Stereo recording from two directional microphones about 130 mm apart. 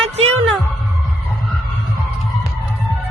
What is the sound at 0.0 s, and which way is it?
Music, 50° right (ahead or behind).